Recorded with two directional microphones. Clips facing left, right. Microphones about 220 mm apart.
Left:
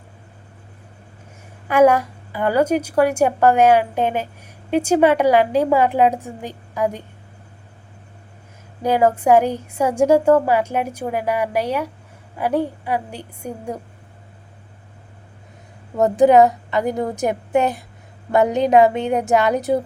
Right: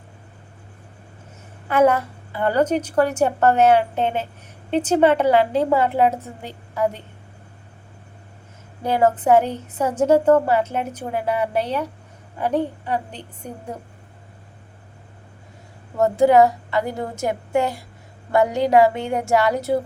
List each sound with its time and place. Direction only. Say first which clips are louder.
1.6 s a woman's voice: left 3 dB; 10° left (ahead or behind)
8.8 s a woman's voice: left 2 dB; 10° left (ahead or behind)
16.0 s a woman's voice: left 2 dB; 20° left (ahead or behind)